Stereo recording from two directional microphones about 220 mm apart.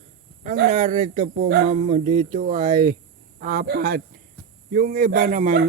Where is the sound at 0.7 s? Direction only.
35° right (ahead or behind).